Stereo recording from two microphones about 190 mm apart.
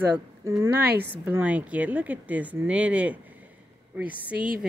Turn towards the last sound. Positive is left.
turn(degrees=-5)  # may be behind; listen again after turning